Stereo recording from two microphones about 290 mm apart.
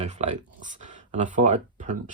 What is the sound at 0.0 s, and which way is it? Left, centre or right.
A man's voice, right.